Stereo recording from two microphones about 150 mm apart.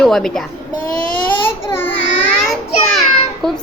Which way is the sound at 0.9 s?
10° left (ahead or behind).